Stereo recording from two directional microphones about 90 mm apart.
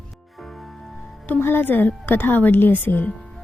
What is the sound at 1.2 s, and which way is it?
A woman's voice, 20° left (ahead or behind).